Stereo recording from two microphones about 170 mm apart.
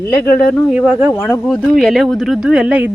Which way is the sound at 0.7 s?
5° right (ahead or behind).